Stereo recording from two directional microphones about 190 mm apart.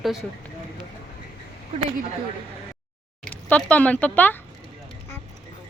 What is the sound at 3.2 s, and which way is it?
Speech, 5° left (ahead or behind).